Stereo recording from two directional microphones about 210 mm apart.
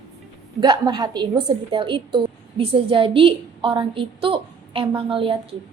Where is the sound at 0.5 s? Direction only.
20° right (ahead or behind).